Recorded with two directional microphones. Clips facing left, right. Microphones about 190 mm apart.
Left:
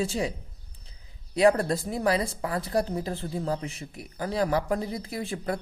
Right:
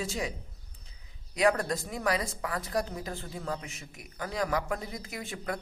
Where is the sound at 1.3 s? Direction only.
30° left (ahead or behind).